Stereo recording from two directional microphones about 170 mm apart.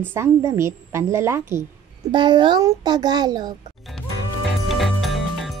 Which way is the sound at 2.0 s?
25° right (ahead or behind).